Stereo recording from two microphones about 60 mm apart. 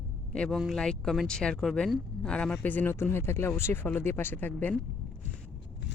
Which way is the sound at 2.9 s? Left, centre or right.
Left.